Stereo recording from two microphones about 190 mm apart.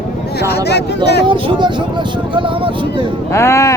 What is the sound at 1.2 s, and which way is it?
Speech, 25° right (ahead or behind).